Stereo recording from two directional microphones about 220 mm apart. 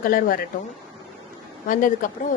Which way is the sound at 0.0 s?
40° left (ahead or behind).